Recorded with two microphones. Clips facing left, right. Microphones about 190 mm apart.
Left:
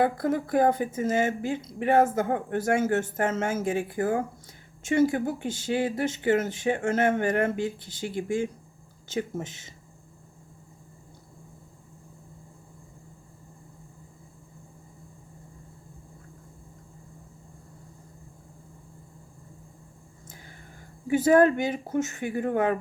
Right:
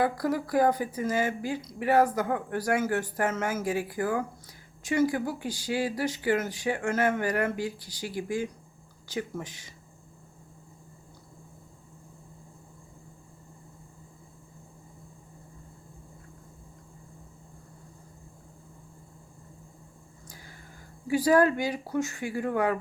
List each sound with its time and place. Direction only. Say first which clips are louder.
0.0 s a woman's voice: left 2 dB; 25° left (ahead or behind)
21.1 s a woman's voice: left 3 dB; 25° left (ahead or behind)